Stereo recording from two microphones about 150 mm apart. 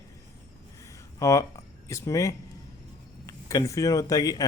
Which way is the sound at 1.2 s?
20° left (ahead or behind).